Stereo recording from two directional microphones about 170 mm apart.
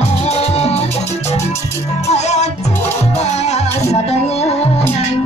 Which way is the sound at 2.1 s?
40° left (ahead or behind).